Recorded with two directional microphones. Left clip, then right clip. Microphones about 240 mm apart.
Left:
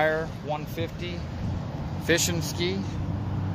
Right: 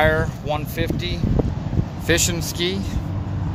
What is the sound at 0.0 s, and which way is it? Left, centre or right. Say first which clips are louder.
Speech: right 6 dB; centre.